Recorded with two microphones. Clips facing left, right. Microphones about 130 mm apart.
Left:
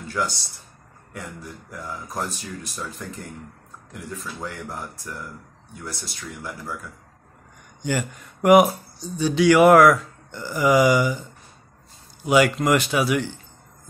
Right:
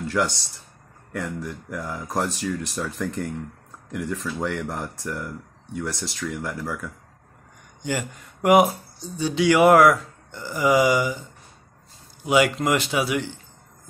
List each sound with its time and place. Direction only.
0.2 s speech: 70° right (ahead or behind)
1.1 s speech: 90° right
7.8 s speech: 25° right (ahead or behind)
12.3 s speech: 25° right (ahead or behind)